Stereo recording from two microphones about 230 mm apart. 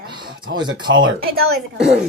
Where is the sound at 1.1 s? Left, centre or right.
Right.